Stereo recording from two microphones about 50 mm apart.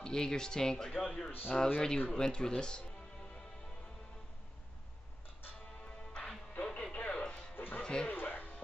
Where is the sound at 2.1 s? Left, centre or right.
Centre.